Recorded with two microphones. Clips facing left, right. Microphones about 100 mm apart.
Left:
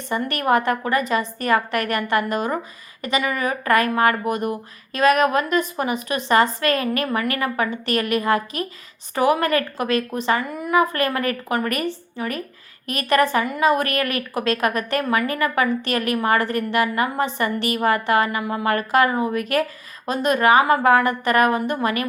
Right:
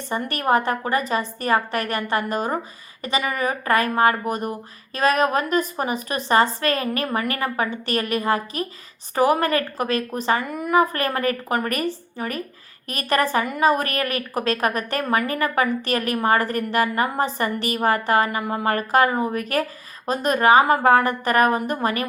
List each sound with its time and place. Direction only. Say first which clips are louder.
0.3 s a woman's voice: left 1 dB; 35° right (ahead or behind)
10.4 s a woman's voice: even; 55° right (ahead or behind)
10.8 s a woman's voice: left 1 dB; 35° right (ahead or behind)